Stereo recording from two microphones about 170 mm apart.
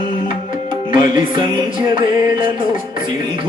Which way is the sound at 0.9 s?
30° right (ahead or behind).